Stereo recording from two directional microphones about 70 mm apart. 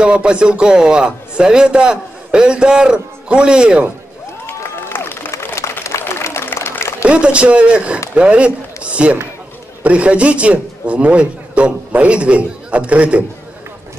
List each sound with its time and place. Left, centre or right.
0.0 s a man's voice: centre
4.5 s a sound: left
7.0 s a man's voice: centre